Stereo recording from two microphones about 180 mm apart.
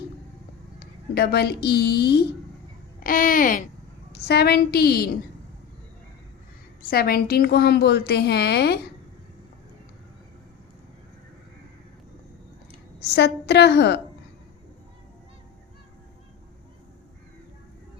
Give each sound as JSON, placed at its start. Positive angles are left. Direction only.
{"t": 0.8, "sound": "a woman's voice", "side_deg": 60}
{"t": 3.0, "sound": "speech", "side_deg": 50}
{"t": 4.1, "sound": "a woman's voice", "side_deg": 60}
{"t": 6.9, "sound": "a woman's voice", "side_deg": 60}
{"t": 13.0, "sound": "a woman's voice", "side_deg": 65}